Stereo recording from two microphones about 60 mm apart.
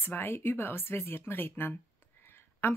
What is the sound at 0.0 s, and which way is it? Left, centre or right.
Speech, left.